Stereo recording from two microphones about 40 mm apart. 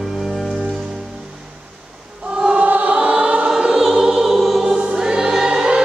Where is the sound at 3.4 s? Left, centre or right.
Centre.